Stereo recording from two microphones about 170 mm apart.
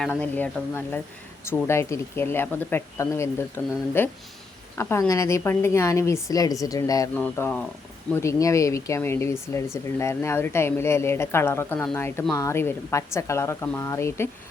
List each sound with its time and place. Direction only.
0.0 s speech: 10° left (ahead or behind)
7.2 s speech: 10° left (ahead or behind)